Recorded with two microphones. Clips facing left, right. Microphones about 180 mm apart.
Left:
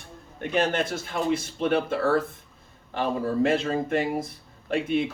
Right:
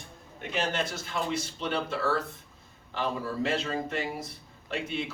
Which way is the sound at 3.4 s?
50° left (ahead or behind).